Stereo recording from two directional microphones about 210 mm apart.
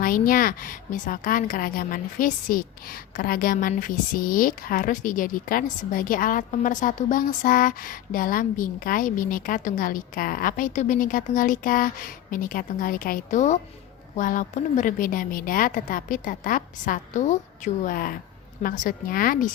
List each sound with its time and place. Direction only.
0.0 s a woman's voice: 45° left (ahead or behind)